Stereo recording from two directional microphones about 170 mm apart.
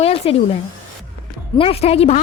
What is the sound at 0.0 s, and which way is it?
Vacuum cleaner, 35° left (ahead or behind).